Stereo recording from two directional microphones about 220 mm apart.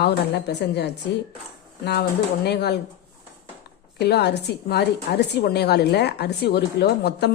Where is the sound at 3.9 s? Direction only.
50° left (ahead or behind).